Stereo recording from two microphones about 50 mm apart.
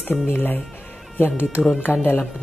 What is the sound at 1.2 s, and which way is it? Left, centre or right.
Speech, left.